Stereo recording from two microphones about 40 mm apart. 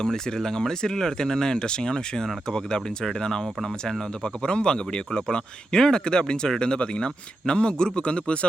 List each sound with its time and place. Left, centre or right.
0.0 s speech: centre; by 8.4 s left